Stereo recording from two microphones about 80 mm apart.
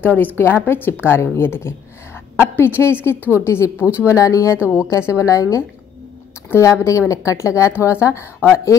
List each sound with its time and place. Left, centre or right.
0.0 s a woman's voice: left